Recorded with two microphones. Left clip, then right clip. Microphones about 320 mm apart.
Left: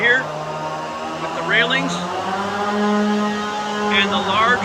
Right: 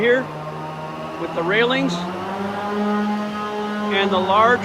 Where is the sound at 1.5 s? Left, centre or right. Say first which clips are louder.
Left 2 dB; centre.